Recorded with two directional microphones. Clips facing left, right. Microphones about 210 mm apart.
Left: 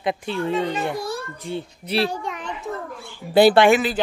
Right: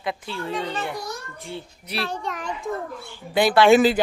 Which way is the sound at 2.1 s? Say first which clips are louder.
Left 1 dB; 5° left (ahead or behind).